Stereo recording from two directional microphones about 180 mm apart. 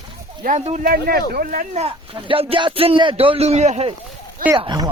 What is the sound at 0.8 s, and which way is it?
Speech, 55° right (ahead or behind).